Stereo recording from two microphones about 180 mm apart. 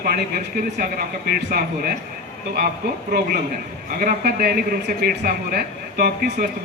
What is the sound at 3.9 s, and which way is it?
A man's voice, 55° right (ahead or behind).